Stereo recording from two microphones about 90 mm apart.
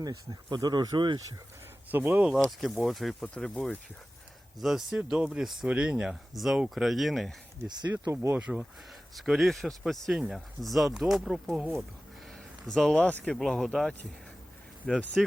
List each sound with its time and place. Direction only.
0.0 s speech: 50° right (ahead or behind)
1.9 s speech: 20° right (ahead or behind)
2.2 s speech: centre (ahead or behind)
4.6 s speech: 5° right (ahead or behind)
7.9 s speech: 30° right (ahead or behind)
8.4 s speech: 10° right (ahead or behind)
12.6 s speech: 5° left (ahead or behind)